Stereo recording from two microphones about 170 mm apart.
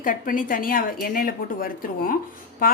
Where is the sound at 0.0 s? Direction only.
55° left (ahead or behind).